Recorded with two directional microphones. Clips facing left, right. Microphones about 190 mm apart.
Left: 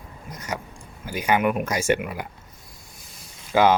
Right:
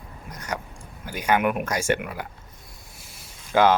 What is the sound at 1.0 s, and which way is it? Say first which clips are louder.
Speech: left 1 dB; 10° left (ahead or behind).